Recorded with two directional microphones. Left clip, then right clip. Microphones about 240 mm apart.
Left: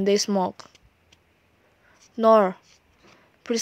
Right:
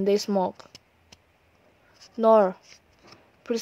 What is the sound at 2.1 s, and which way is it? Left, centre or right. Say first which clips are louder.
A woman's voice: left 1 dB; left.